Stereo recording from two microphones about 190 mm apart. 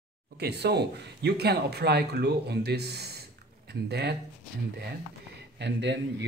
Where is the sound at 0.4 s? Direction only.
60° right (ahead or behind).